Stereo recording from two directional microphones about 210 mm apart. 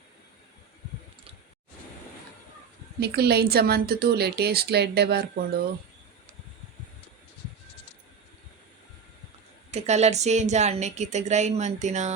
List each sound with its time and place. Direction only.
3.0 s a woman's voice: 50° right (ahead or behind)
9.7 s a woman's voice: 30° right (ahead or behind)